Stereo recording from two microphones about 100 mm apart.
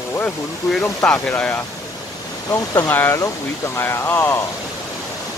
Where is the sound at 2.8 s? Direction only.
20° left (ahead or behind).